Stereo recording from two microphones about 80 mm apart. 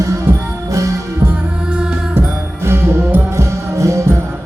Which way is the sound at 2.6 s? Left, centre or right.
Right.